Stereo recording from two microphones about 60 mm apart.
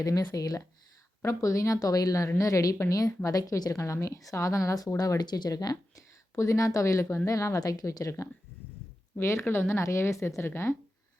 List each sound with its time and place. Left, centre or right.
0.0 s a woman's voice: left
1.2 s a woman's voice: left
6.3 s speech: left
9.2 s a woman's voice: left